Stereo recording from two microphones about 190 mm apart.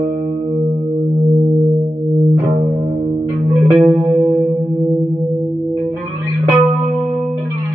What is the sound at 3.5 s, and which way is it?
Music, centre (ahead or behind).